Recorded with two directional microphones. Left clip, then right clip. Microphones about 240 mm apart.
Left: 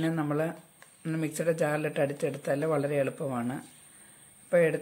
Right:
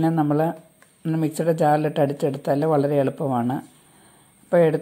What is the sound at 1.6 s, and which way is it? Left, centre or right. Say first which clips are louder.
Speech: right 9 dB; centre.